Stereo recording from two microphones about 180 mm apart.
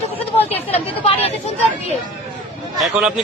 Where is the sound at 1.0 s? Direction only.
35° left (ahead or behind).